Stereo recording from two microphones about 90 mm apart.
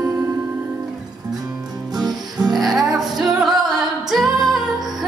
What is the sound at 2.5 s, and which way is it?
Music, centre (ahead or behind).